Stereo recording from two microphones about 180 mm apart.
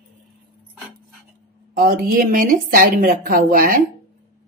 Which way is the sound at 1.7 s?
50° right (ahead or behind).